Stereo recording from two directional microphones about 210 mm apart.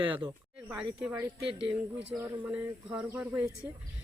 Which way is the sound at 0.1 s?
20° right (ahead or behind).